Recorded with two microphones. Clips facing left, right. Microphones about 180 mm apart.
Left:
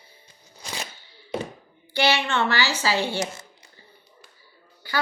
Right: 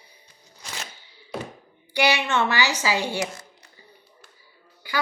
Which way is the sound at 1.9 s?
15° right (ahead or behind).